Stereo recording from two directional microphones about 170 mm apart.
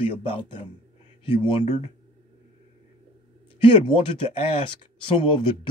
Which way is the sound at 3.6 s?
30° left (ahead or behind).